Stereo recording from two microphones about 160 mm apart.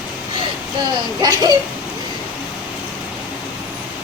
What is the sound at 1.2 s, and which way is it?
Speech, 25° right (ahead or behind).